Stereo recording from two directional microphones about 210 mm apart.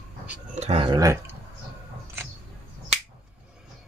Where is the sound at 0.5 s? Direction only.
30° right (ahead or behind); by 1.4 s 15° right (ahead or behind).